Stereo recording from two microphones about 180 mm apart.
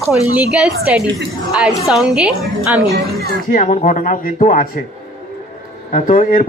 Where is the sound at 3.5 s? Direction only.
45° left (ahead or behind).